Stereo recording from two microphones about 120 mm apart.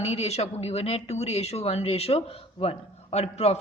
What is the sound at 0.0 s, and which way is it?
A man's voice, 60° left (ahead or behind).